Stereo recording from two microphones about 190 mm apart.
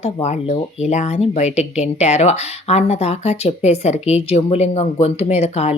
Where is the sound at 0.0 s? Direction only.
35° left (ahead or behind).